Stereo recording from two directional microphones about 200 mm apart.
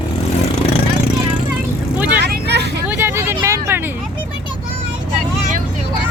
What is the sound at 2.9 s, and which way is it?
Vehicle, 10° right (ahead or behind).